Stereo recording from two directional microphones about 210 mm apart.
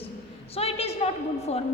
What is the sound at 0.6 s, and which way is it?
A woman's voice, 30° left (ahead or behind).